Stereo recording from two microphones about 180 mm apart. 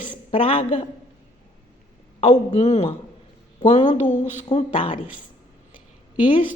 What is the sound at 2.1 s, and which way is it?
Speech, 40° left (ahead or behind).